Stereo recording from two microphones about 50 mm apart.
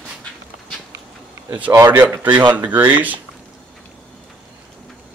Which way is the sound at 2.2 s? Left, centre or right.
Right.